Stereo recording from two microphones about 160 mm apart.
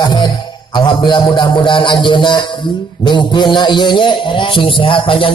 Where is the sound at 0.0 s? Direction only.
25° left (ahead or behind).